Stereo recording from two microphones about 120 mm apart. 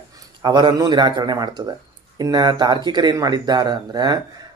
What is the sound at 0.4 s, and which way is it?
Speech, 40° right (ahead or behind).